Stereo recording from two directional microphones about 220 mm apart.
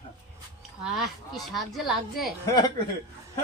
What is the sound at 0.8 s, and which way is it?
Speech, centre (ahead or behind).